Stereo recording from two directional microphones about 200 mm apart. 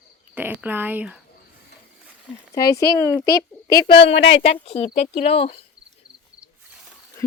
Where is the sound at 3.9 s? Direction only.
25° left (ahead or behind).